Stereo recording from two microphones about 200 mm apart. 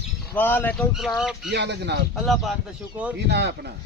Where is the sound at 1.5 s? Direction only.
60° right (ahead or behind).